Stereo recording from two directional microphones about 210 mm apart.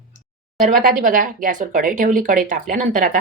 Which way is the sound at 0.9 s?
40° right (ahead or behind).